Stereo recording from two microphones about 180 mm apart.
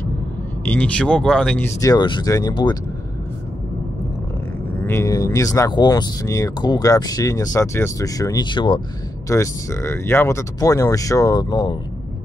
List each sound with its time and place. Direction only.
0.7 s speech: 5° left (ahead or behind)
1.8 s speech: 20° left (ahead or behind)
4.8 s speech: 15° left (ahead or behind)